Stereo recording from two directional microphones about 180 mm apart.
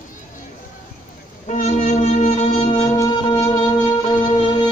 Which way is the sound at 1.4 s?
40° left (ahead or behind).